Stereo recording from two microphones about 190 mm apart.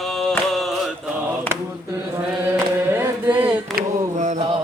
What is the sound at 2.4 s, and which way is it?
Chant, 10° right (ahead or behind).